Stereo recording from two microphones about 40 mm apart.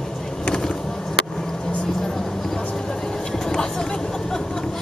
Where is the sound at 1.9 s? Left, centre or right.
Centre.